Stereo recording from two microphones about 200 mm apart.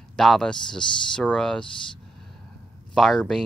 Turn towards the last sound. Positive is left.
turn(degrees=0)  # may be behind; listen again after turning